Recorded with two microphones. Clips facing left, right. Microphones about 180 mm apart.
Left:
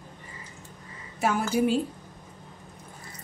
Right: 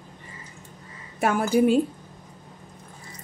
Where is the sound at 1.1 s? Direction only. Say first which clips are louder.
Right 4 dB; 55° right (ahead or behind).